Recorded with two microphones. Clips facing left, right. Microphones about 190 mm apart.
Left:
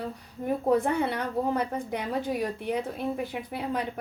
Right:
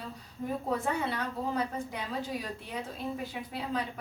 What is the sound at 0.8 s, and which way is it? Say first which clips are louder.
A woman's voice: left 5 dB; 60° left (ahead or behind).